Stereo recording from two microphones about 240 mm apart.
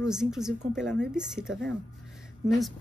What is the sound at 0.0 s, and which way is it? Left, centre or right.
A woman's voice, centre.